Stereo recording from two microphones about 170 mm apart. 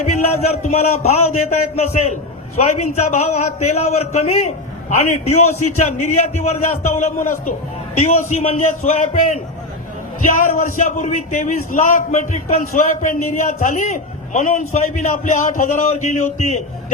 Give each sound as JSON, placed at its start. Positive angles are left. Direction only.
{"t": 0.5, "sound": "a man's voice", "side_deg": 40}